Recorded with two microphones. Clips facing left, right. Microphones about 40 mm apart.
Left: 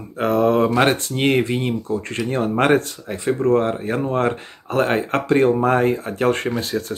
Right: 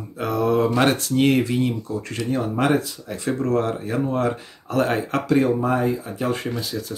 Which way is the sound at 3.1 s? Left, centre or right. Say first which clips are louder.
Left 4 dB; left.